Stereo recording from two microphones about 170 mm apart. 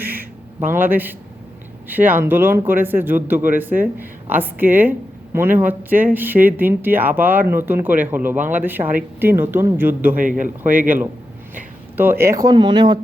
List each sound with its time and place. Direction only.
0.0 s a sound: 10° right (ahead or behind)
1.9 s speech: 10° right (ahead or behind)
10.2 s speech: 50° right (ahead or behind)
10.6 s speech: 10° right (ahead or behind); by 13.0 s 25° right (ahead or behind)